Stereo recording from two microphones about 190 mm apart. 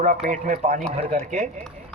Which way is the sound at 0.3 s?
45° right (ahead or behind).